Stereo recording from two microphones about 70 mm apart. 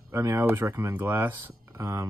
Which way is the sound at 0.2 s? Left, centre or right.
Right.